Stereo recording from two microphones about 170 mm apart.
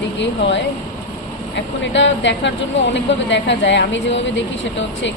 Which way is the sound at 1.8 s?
90° left.